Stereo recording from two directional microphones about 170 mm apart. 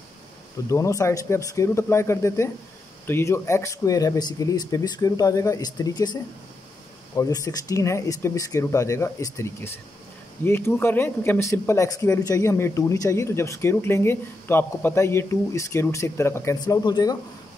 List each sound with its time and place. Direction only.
0.7 s a man's voice: 20° left (ahead or behind)
7.2 s speech: 20° left (ahead or behind)